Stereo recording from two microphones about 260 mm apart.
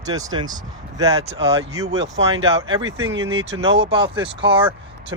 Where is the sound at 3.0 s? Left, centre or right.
Right.